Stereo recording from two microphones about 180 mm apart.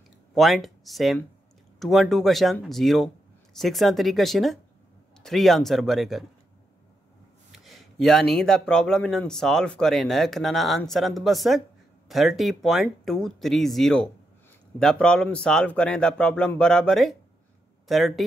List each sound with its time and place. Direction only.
0.3 s speech: centre (ahead or behind)
7.5 s speech: centre (ahead or behind)